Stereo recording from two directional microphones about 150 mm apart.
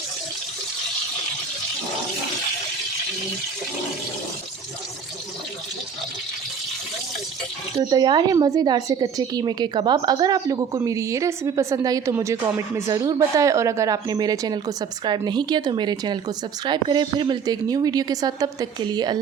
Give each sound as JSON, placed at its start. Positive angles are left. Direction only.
{"t": 7.9, "sound": "a woman's voice", "side_deg": -30}